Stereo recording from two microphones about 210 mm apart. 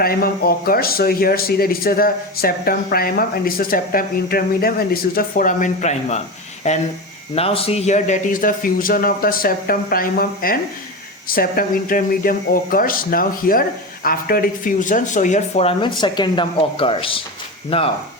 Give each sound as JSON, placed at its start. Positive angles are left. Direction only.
{"t": 0.0, "sound": "speech", "side_deg": 45}